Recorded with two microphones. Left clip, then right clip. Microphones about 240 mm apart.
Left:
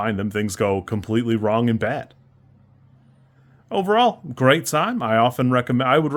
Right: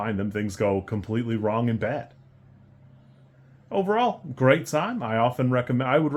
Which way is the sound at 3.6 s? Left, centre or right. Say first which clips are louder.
Left 5 dB; left.